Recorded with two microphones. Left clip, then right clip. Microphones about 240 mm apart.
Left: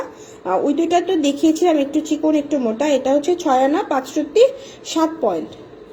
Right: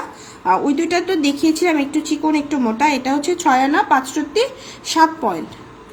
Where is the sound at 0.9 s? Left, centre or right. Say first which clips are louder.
Left 1 dB; right.